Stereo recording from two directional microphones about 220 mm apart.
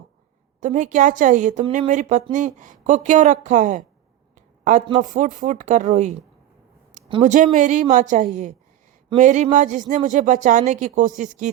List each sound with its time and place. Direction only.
0.6 s speech: 35° right (ahead or behind)
4.4 s a sound: 35° right (ahead or behind)
4.9 s speech: 35° right (ahead or behind)